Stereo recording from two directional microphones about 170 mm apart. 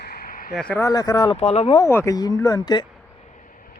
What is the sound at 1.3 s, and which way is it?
Speech, 40° left (ahead or behind).